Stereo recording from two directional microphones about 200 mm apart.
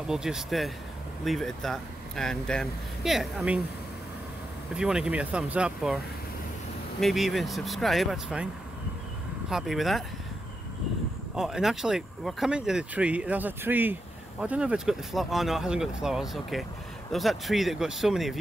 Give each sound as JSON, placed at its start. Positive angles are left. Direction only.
{"t": 0.1, "sound": "speech", "side_deg": -5}
{"t": 4.7, "sound": "speech", "side_deg": -5}
{"t": 7.0, "sound": "speech", "side_deg": 0}
{"t": 9.5, "sound": "speech", "side_deg": 0}
{"t": 11.3, "sound": "speech", "side_deg": 0}